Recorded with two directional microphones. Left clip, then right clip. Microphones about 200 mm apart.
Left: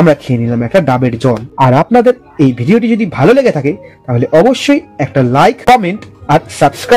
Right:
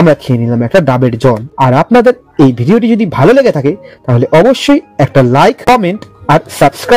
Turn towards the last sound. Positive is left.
turn(degrees=-40)  # may be behind; listen again after turning